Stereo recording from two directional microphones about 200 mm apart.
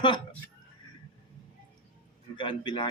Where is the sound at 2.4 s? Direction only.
25° left (ahead or behind).